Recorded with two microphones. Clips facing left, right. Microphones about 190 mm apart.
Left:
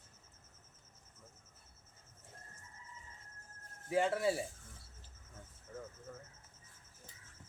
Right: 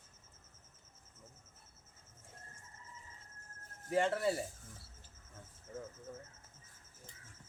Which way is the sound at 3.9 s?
5° left (ahead or behind).